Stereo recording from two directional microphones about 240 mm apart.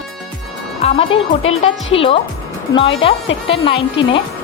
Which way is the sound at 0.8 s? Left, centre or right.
Left.